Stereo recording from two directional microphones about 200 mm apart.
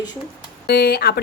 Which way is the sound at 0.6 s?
50° left (ahead or behind).